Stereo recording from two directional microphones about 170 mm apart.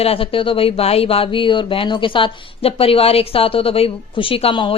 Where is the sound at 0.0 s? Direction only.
35° left (ahead or behind).